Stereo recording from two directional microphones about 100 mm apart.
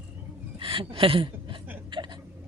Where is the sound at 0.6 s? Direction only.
65° right (ahead or behind).